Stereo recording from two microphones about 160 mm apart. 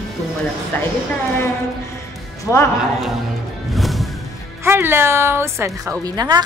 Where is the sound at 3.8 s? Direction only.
Centre (ahead or behind).